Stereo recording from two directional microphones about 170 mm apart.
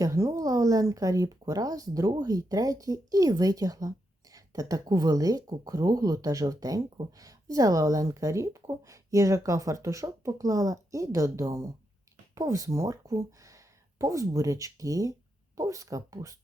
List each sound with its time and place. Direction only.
0.0 s speech: 20° right (ahead or behind)